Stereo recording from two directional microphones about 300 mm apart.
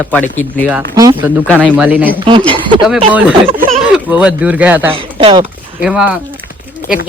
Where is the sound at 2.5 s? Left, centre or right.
Centre.